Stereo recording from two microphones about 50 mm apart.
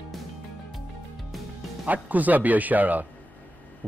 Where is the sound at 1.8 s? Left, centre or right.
Right.